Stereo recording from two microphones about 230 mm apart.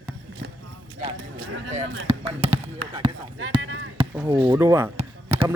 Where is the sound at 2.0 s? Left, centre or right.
Right.